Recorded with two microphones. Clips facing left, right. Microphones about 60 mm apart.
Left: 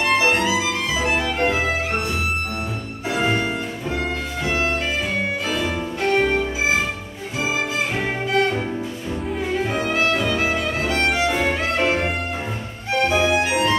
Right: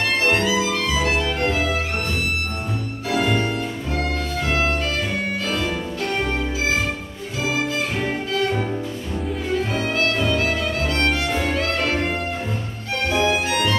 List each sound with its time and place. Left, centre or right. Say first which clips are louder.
0.0 s music: left 1 dB; left
3.1 s music: even; centre
6.3 s music: left 2 dB; centre
8.1 s music: left 4 dB; centre
9.7 s music: left 1 dB; centre